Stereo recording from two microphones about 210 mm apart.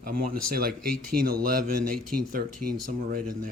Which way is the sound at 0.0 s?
45° right (ahead or behind).